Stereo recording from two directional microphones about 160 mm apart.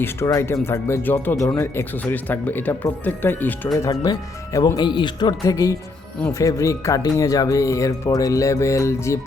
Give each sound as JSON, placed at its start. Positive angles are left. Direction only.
{"t": 0.3, "sound": "speech", "side_deg": 20}
{"t": 3.8, "sound": "speech", "side_deg": 25}